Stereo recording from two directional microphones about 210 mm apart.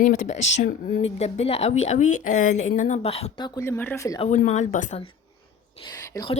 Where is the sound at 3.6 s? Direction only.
10° left (ahead or behind).